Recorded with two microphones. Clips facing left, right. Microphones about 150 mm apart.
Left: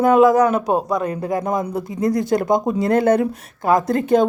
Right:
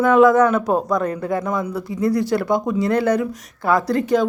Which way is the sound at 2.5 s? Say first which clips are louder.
Left 3 dB; 25° left (ahead or behind).